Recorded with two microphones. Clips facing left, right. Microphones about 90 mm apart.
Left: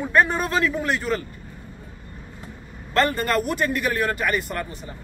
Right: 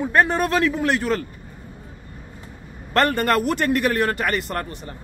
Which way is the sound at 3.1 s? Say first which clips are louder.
Right 3 dB; 65° right (ahead or behind).